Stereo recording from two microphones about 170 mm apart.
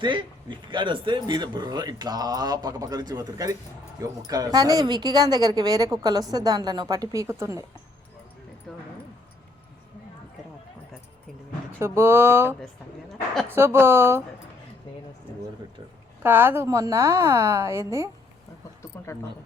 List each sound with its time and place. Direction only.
0.0 s speech: 30° right (ahead or behind)
11.8 s a woman's voice: 15° right (ahead or behind)
16.2 s a woman's voice: 10° right (ahead or behind)
18.9 s a sound: 15° left (ahead or behind)